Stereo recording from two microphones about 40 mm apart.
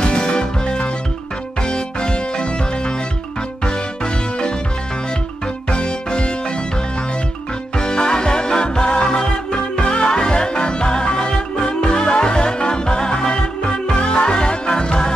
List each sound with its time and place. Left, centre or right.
0.0 s music: left
5.7 s music: left
7.7 s music: centre